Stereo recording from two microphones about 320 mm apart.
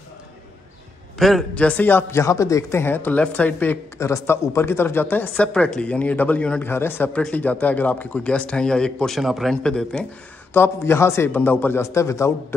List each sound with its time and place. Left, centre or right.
1.1 s a man's voice: centre